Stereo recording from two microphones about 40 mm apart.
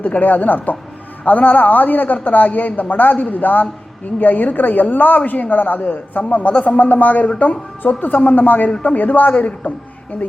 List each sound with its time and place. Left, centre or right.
0.0 s a woman's voice: left
5.8 s a man's voice: left